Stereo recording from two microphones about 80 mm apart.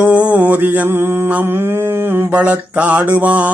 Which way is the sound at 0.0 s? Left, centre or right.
Centre.